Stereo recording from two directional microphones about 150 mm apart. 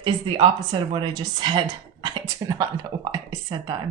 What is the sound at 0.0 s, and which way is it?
A woman's voice, 30° right (ahead or behind).